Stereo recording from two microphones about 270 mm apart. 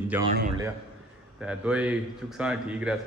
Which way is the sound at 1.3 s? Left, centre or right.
Centre.